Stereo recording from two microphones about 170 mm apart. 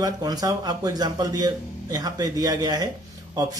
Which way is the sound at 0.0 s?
20° right (ahead or behind).